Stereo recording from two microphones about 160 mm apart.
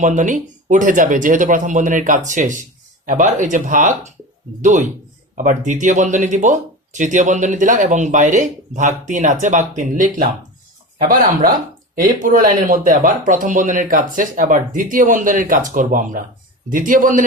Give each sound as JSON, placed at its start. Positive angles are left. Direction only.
{"t": 0.0, "sound": "speech", "side_deg": -50}